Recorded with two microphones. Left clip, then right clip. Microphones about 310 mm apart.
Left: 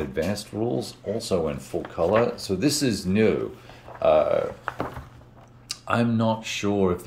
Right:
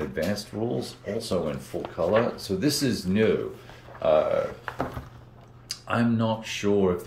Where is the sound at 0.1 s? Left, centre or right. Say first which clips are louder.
Left 1 dB; centre.